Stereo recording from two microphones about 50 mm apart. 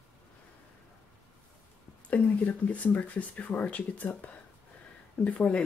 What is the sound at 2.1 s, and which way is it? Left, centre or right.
Speech, left.